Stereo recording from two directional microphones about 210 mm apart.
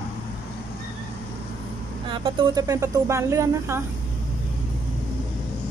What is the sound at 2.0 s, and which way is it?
A woman's voice, 25° right (ahead or behind).